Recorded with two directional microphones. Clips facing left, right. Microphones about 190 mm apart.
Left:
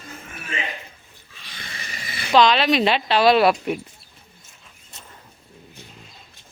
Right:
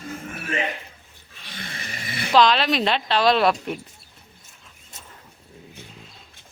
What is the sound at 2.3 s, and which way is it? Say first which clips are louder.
Speech: left 2 dB; centre (ahead or behind).